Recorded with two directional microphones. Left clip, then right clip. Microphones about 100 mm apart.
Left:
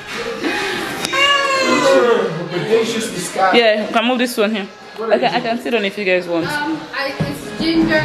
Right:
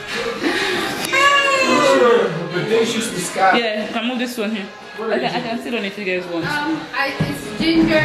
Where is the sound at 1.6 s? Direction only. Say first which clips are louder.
Even; 15° left (ahead or behind).